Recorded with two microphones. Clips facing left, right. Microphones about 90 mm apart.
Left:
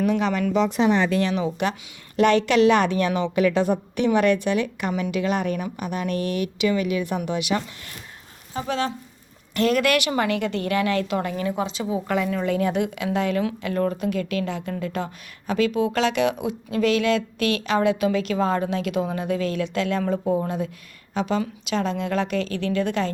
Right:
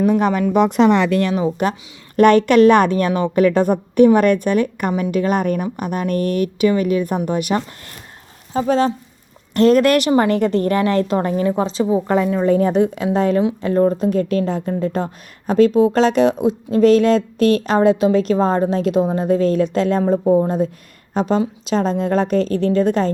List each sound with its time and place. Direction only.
0.0 s a woman's voice: 40° right (ahead or behind)
0.5 s a woman's voice: 55° right (ahead or behind); by 23.1 s 35° right (ahead or behind)